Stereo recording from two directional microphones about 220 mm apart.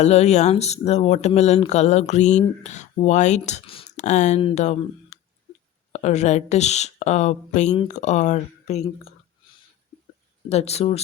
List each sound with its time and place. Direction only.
0.0 s speech: 30° left (ahead or behind)
5.9 s speech: 30° left (ahead or behind)
10.5 s speech: 30° left (ahead or behind)